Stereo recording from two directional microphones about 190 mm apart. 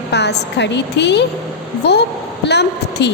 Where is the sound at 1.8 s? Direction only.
60° left (ahead or behind).